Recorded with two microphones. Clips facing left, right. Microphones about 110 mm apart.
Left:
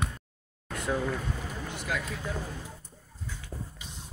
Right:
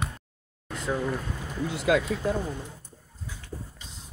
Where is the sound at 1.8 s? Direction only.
75° right (ahead or behind).